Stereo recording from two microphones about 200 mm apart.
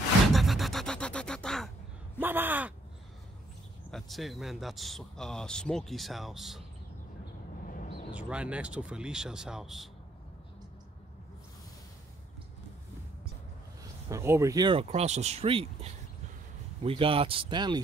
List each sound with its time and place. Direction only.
0.3 s a sound: centre (ahead or behind)
2.1 s speech: 10° right (ahead or behind)
3.9 s speech: centre (ahead or behind)
7.6 s a sound: 45° left (ahead or behind)
8.1 s speech: 5° right (ahead or behind)
14.0 s speech: 15° right (ahead or behind)